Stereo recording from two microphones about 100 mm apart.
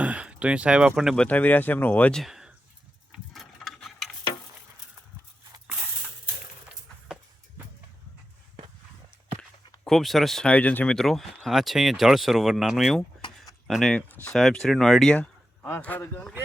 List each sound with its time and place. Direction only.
0.0 s speech: 15° right (ahead or behind)
1.1 s speech: 10° left (ahead or behind)
2.2 s a sound: 5° right (ahead or behind)
9.4 s speech: 5° left (ahead or behind)
10.9 s speech: centre (ahead or behind)
15.1 s a sound: 10° left (ahead or behind)
15.7 s speech: 20° left (ahead or behind)